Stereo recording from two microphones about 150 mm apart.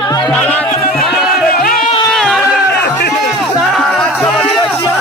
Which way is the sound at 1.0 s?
5° right (ahead or behind).